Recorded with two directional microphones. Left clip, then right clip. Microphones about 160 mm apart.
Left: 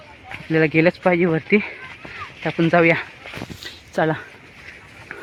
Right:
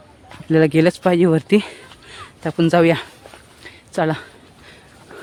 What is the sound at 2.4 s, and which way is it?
Speech, 35° right (ahead or behind).